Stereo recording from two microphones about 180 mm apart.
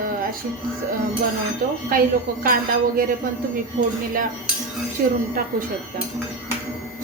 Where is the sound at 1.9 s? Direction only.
50° right (ahead or behind).